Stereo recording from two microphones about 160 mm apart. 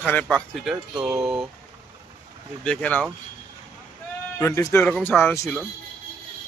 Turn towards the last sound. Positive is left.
turn(degrees=15)  # may be behind; listen again after turning